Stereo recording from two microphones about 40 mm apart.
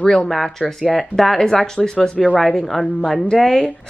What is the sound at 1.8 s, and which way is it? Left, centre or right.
Speech, left.